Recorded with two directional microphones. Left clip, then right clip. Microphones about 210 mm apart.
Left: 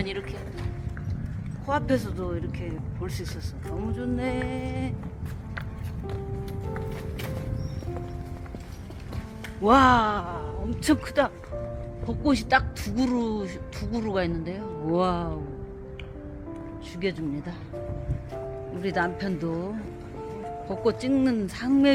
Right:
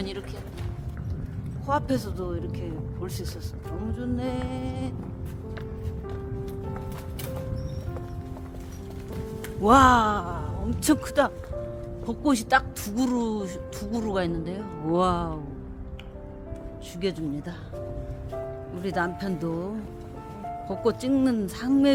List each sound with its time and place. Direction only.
0.0 s speech: centre (ahead or behind)
1.6 s a man's voice: centre (ahead or behind)
9.6 s speech: 15° right (ahead or behind)
17.0 s speech: 20° right (ahead or behind)
18.8 s speech: 10° right (ahead or behind)